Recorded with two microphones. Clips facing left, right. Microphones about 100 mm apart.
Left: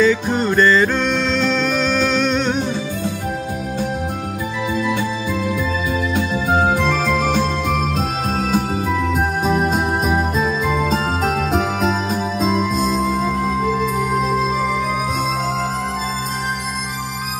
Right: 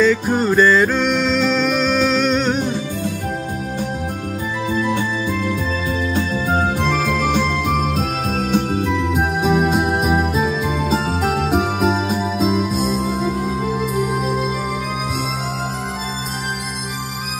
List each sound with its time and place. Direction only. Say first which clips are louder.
0.0 s music: even; centre (ahead or behind)
4.7 s music: right 1 dB; 50° right (ahead or behind)
6.5 s music: left 3 dB; 50° left (ahead or behind)
8.5 s music: right 3 dB; 5° left (ahead or behind)
13.3 s music: left 2 dB; 45° left (ahead or behind)
13.7 s music: left 1 dB; 5° right (ahead or behind)